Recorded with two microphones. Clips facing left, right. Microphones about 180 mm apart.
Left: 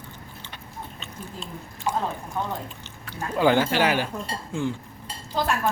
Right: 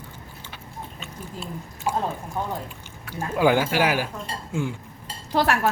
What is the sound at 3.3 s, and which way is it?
Speech, 10° right (ahead or behind).